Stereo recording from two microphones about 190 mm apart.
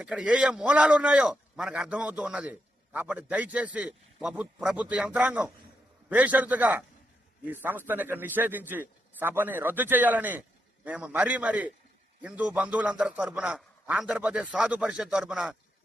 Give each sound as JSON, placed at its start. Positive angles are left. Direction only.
{"t": 0.0, "sound": "a man's voice", "side_deg": -5}